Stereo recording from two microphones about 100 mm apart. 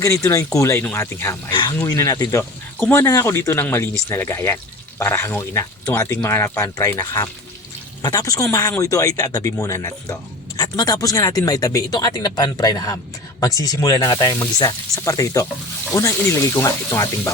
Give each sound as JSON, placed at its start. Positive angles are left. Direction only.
{"t": 0.0, "sound": "speech", "side_deg": 30}
{"t": 1.5, "sound": "speech", "side_deg": 45}
{"t": 1.7, "sound": "speech", "side_deg": 30}
{"t": 2.4, "sound": "speech", "side_deg": 25}